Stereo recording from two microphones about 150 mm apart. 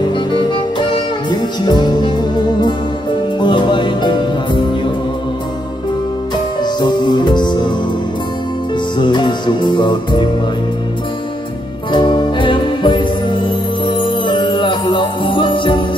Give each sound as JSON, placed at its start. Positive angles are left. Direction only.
{"t": 0.1, "sound": "music", "side_deg": 30}
{"t": 6.6, "sound": "music", "side_deg": 30}
{"t": 8.9, "sound": "music", "side_deg": 30}
{"t": 11.9, "sound": "music", "side_deg": 30}